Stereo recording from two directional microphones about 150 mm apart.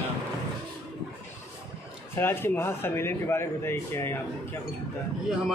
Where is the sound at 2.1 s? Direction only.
15° left (ahead or behind).